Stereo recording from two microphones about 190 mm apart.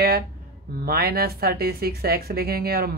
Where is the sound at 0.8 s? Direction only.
55° right (ahead or behind).